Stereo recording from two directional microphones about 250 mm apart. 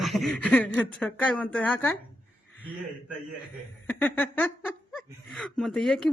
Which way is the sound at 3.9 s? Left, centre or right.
Centre.